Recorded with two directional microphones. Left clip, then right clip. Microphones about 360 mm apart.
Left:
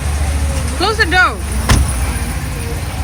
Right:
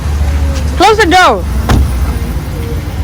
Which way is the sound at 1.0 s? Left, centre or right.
Centre.